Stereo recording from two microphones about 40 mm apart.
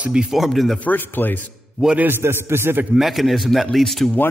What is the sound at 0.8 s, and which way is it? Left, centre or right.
Speech, left.